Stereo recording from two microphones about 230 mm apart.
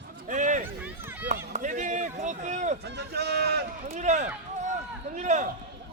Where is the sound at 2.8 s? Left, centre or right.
Right.